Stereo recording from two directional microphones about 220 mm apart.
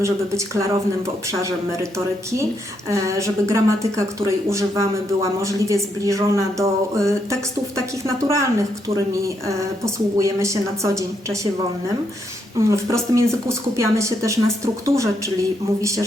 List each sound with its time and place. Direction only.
0.0 s a woman's voice: 15° right (ahead or behind)
2.9 s a woman's voice: 15° right (ahead or behind)
12.5 s a woman's voice: 15° right (ahead or behind)